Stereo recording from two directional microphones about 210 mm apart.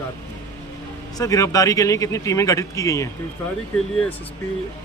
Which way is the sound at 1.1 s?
15° left (ahead or behind).